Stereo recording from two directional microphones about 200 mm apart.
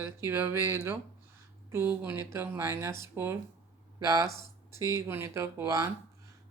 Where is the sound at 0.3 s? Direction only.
10° right (ahead or behind).